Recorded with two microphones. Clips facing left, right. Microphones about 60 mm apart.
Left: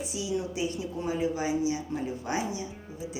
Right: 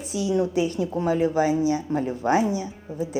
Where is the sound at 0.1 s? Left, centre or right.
Right.